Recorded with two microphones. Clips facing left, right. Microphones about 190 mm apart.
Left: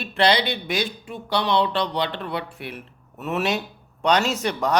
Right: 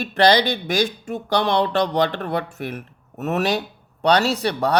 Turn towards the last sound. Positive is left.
turn(degrees=-35)  # may be behind; listen again after turning